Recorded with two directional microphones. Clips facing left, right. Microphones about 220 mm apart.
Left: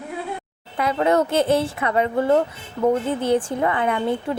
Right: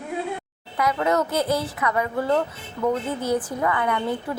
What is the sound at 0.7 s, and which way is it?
A woman's voice, 30° left (ahead or behind).